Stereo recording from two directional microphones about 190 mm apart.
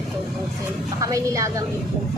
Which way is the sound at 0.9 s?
15° right (ahead or behind).